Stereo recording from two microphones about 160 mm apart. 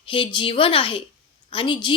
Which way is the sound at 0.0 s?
35° left (ahead or behind).